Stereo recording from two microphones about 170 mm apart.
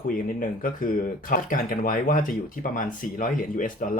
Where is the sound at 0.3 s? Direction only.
55° left (ahead or behind).